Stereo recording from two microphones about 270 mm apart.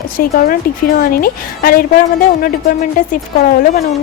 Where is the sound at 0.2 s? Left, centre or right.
Left.